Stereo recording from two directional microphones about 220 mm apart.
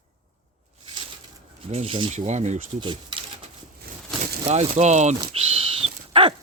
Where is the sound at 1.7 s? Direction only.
25° right (ahead or behind).